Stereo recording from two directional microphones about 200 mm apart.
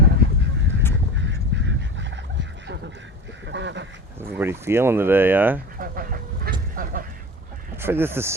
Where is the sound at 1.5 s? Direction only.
60° right (ahead or behind).